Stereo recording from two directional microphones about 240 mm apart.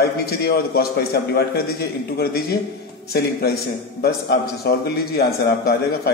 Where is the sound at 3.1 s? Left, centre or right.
Left.